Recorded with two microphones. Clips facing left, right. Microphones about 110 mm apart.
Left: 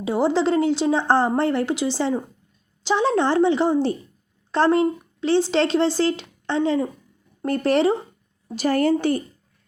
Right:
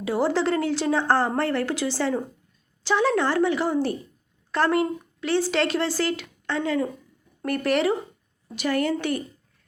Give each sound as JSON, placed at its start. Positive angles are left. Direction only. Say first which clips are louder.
{"t": 0.0, "sound": "a woman's voice", "louder": "left 3 dB", "side_deg": 20}